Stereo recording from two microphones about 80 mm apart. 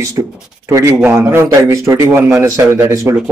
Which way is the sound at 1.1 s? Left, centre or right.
Right.